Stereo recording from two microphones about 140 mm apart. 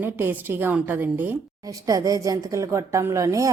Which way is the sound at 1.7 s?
25° right (ahead or behind).